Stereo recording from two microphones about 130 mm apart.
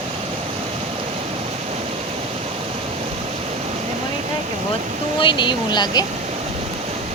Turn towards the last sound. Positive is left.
turn(degrees=35)  # may be behind; listen again after turning